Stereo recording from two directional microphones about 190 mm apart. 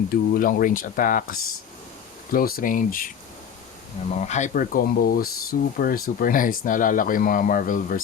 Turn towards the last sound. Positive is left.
turn(degrees=45)  # may be behind; listen again after turning